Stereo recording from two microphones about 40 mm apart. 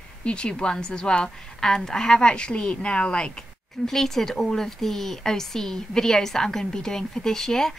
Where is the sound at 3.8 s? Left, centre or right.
Centre.